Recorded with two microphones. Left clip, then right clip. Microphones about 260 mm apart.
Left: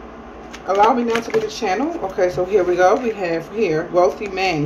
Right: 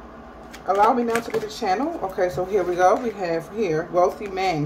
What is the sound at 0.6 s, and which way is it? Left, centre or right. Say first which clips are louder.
Speech: left 3 dB; right.